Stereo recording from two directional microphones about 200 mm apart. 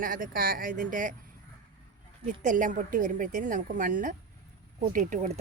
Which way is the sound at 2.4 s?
40° right (ahead or behind).